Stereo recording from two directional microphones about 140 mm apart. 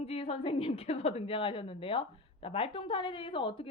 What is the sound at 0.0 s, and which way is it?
A woman's voice, 45° left (ahead or behind).